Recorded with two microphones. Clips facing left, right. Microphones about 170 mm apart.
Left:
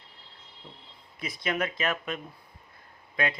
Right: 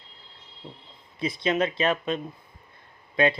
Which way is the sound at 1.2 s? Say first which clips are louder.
Right 6 dB; 25° right (ahead or behind).